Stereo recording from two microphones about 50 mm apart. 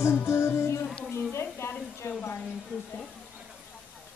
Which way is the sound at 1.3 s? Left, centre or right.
Left.